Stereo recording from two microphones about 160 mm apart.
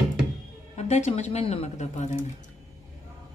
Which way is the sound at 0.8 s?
45° left (ahead or behind).